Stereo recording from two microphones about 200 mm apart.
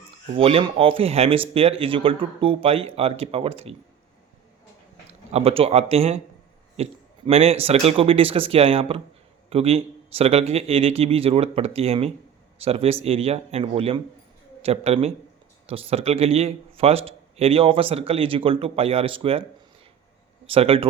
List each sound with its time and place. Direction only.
0.3 s speech: 30° right (ahead or behind)
5.3 s speech: 30° right (ahead or behind)
20.5 s speech: 30° right (ahead or behind)